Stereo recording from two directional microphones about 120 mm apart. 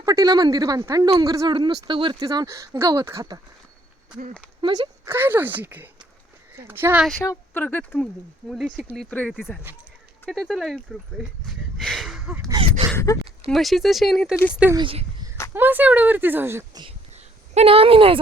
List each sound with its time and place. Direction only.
0.0 s speech: 30° right (ahead or behind)
1.5 s speech: 40° right (ahead or behind)
4.6 s speech: 40° right (ahead or behind)
5.0 s speech: 20° right (ahead or behind)
7.2 s speech: 20° left (ahead or behind)
7.9 s speech: centre (ahead or behind)
9.0 s speech: 10° left (ahead or behind)
9.3 s speech: 5° right (ahead or behind)
12.6 s speech: 35° right (ahead or behind)
13.1 s speech: 30° left (ahead or behind)
13.5 s speech: centre (ahead or behind)
14.8 s speech: 50° right (ahead or behind)
15.5 s speech: 15° right (ahead or behind)
17.1 s a sound: 65° right (ahead or behind); by 18.2 s 50° right (ahead or behind)